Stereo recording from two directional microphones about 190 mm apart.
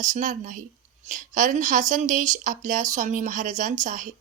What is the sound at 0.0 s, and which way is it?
Speech, 40° right (ahead or behind).